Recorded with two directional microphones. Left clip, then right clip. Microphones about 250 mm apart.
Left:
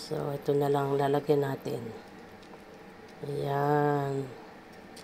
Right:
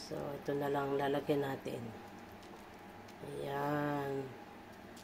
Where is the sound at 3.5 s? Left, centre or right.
Left.